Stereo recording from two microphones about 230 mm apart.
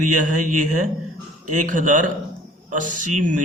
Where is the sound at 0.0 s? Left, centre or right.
Right.